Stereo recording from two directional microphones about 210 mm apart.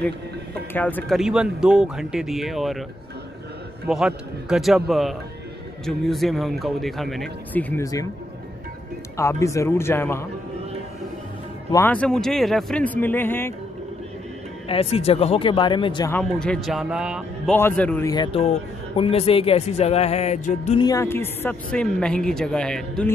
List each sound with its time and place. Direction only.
0.7 s speech: 10° left (ahead or behind)
3.9 s speech: 5° right (ahead or behind); by 8.1 s 15° left (ahead or behind)
9.1 s speech: 15° left (ahead or behind)
11.7 s speech: 10° left (ahead or behind)
14.7 s speech: 25° left (ahead or behind)
16.1 s speech: 5° left (ahead or behind)
17.6 s speech: 10° left (ahead or behind)
18.1 s speech: 20° left (ahead or behind)
20.8 s speech: 15° left (ahead or behind)